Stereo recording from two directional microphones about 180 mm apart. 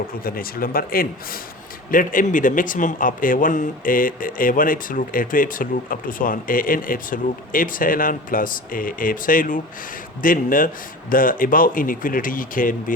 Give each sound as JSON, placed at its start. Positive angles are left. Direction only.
{"t": 0.2, "sound": "a man's voice", "side_deg": 55}